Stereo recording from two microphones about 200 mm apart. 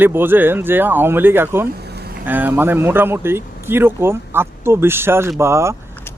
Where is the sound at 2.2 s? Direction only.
10° right (ahead or behind).